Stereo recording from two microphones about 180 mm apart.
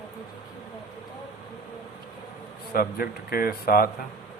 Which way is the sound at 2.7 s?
55° left (ahead or behind).